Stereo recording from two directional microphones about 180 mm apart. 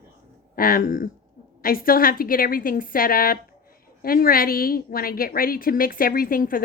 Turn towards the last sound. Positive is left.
turn(degrees=50)  # may be behind; listen again after turning